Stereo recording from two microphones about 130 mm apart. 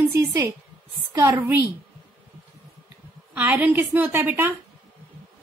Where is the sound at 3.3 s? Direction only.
10° right (ahead or behind).